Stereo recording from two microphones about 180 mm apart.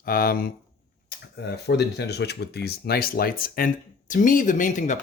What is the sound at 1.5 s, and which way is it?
Speech, 65° left (ahead or behind).